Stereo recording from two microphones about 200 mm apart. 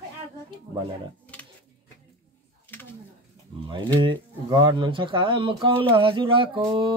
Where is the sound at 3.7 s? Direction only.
25° right (ahead or behind).